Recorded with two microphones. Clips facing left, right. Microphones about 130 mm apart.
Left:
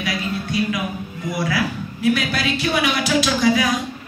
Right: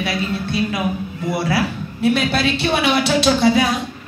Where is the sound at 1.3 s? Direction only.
30° right (ahead or behind).